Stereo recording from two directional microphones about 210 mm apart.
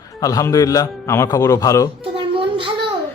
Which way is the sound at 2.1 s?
25° right (ahead or behind).